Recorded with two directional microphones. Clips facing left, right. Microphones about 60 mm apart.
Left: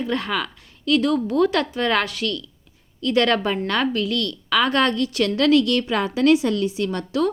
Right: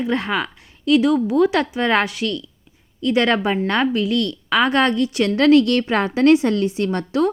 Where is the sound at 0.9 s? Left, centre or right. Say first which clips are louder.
Right 3 dB; centre.